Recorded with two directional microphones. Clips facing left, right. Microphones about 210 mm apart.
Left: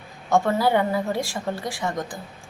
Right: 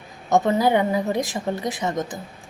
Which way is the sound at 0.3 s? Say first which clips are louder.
Right 2 dB; 20° right (ahead or behind).